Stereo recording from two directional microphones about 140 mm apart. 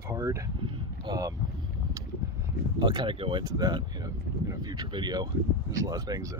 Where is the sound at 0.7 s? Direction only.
30° right (ahead or behind).